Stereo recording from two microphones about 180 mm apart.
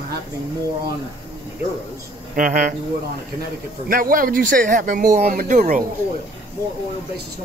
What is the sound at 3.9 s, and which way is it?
Speech, 50° right (ahead or behind).